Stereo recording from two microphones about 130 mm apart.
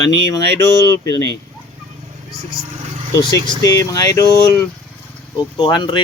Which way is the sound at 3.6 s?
25° left (ahead or behind).